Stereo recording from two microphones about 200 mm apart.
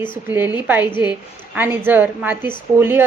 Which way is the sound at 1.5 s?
10° right (ahead or behind).